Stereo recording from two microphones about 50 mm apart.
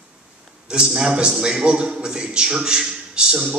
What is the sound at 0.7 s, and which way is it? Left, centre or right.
Speech, centre.